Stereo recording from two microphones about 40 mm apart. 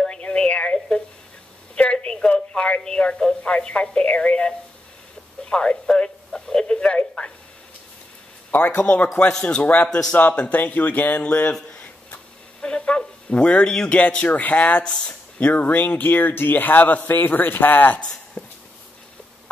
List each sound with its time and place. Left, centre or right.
0.0 s a sound: left
1.8 s a woman's voice: left
8.5 s speech: left
9.8 s a man's voice: centre
10.4 s a man's voice: left
12.6 s a sound: left
13.4 s speech: left
15.4 s a man's voice: left
18.4 s a sound: left